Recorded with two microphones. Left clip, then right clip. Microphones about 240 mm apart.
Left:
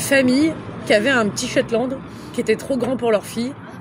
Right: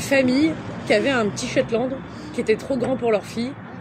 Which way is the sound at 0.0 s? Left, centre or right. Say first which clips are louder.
Left 2 dB; left.